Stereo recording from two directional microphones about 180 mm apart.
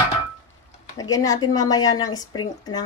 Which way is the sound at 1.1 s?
20° left (ahead or behind).